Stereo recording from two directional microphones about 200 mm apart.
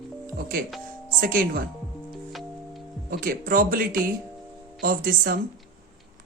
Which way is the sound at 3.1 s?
45° right (ahead or behind).